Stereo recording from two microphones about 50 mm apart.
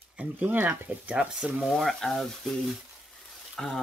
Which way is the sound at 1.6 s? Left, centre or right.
Centre.